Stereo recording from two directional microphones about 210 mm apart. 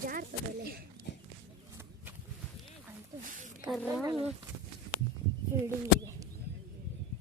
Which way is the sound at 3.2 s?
35° right (ahead or behind).